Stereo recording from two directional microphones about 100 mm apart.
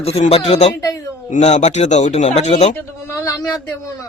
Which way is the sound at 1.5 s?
90° left.